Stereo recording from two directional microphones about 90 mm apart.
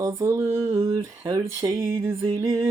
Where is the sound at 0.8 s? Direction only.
40° right (ahead or behind).